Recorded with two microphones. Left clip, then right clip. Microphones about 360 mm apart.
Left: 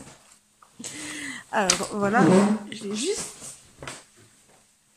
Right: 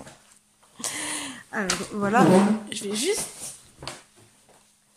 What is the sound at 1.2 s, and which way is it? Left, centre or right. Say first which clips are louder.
Speech: left 5 dB; centre.